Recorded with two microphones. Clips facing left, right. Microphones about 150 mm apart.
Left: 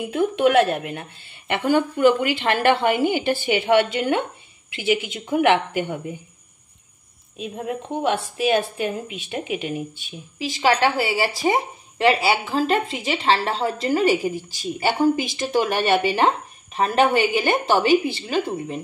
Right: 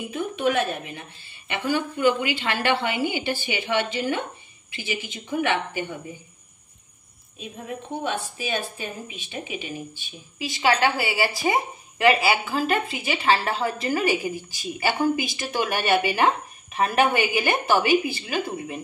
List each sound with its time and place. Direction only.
0.1 s a woman's voice: 75° left (ahead or behind)
7.3 s speech: 70° left (ahead or behind)
10.6 s a woman's voice: 35° left (ahead or behind)